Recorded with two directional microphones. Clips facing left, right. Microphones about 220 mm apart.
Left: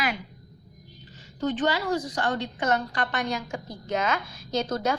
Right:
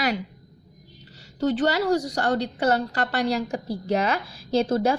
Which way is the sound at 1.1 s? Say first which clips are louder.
Right 4 dB; 40° right (ahead or behind).